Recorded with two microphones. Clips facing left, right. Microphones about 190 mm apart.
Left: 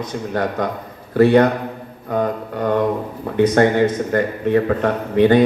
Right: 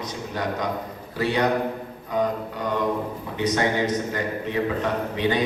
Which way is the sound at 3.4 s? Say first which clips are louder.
Left 9 dB; 55° left (ahead or behind).